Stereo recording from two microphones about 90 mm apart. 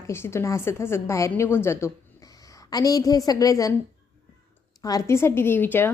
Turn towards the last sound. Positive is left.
turn(degrees=20)  # may be behind; listen again after turning